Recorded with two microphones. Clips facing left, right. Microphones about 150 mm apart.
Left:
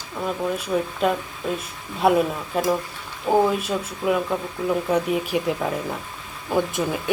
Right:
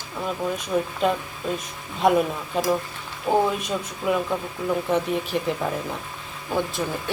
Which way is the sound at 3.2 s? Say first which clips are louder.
Left 2 dB; 5° left (ahead or behind).